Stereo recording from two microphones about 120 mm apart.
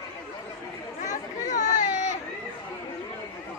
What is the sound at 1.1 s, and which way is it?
Chatter, 90° left.